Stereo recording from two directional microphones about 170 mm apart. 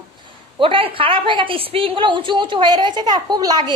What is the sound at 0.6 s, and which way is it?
A woman's voice, 30° right (ahead or behind).